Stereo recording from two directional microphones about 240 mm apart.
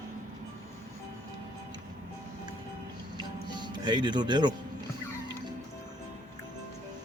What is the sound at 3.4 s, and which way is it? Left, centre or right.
Speech, centre.